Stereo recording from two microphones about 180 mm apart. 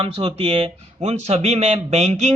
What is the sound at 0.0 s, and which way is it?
Speech, 30° right (ahead or behind).